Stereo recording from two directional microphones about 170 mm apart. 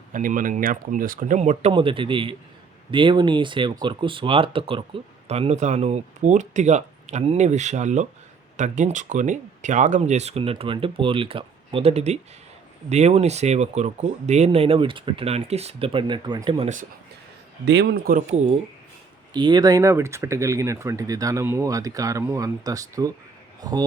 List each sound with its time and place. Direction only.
0.1 s speech: 50° right (ahead or behind); by 16.6 s 30° right (ahead or behind)
17.7 s speech: 80° right
19.3 s a man's voice: 25° right (ahead or behind)